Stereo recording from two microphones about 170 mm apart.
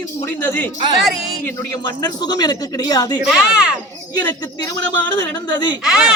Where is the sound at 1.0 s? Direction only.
Centre (ahead or behind).